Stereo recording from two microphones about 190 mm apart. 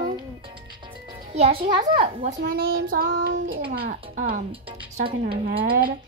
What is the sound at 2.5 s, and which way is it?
Speech, 50° right (ahead or behind).